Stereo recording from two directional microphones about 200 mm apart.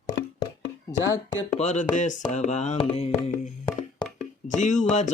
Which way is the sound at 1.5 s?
35° left (ahead or behind).